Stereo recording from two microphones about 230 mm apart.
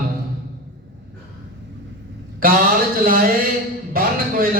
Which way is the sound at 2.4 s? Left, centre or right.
Right.